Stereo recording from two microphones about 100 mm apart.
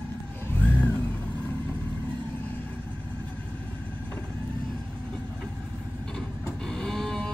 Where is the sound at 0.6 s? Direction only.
15° left (ahead or behind).